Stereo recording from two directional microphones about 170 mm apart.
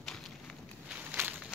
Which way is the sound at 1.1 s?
10° right (ahead or behind).